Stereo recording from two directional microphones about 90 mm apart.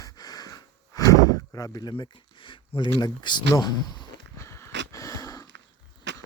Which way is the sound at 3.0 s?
55° left (ahead or behind).